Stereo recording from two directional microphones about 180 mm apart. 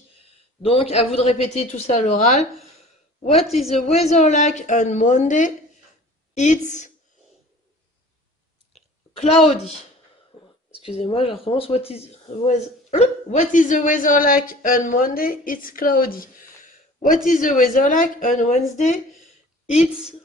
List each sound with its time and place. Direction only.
0.6 s a woman's voice: 30° left (ahead or behind)
8.7 s chewing: centre (ahead or behind)
9.1 s speech: 35° left (ahead or behind)
10.3 s a sound: 35° left (ahead or behind)
10.8 s speech: 30° left (ahead or behind)
19.6 s a woman's voice: 5° right (ahead or behind)